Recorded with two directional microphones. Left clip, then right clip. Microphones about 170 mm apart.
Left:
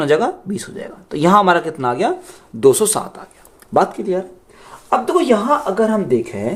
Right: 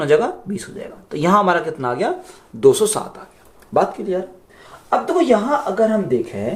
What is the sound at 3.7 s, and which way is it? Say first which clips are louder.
Speech: left 2 dB; 65° left (ahead or behind).